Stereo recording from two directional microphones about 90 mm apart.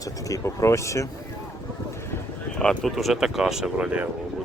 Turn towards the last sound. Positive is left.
turn(degrees=-15)  # may be behind; listen again after turning